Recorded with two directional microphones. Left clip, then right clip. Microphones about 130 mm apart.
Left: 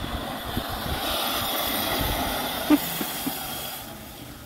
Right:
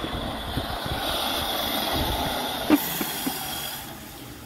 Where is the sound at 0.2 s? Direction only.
20° left (ahead or behind).